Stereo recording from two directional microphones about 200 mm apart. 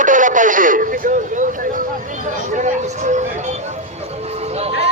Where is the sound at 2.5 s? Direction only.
40° right (ahead or behind).